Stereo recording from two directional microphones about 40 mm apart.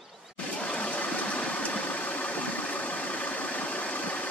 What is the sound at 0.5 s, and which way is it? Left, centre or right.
Vehicle, left.